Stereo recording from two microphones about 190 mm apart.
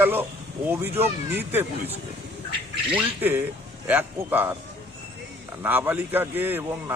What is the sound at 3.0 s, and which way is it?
A man's voice, 10° right (ahead or behind).